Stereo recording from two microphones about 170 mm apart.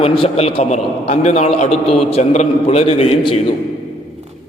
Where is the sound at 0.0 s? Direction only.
35° left (ahead or behind).